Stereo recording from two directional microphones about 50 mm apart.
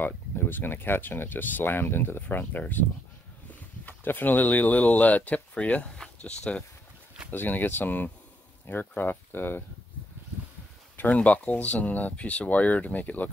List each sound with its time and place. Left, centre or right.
0.0 s speech: left
2.2 s speech: left; by 6.6 s centre
7.2 s speech: left
11.0 s speech: left